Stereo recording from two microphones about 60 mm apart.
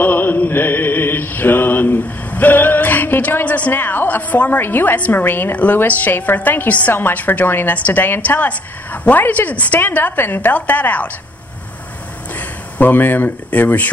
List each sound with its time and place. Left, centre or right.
0.0 s mantra: left
12.4 s speech: left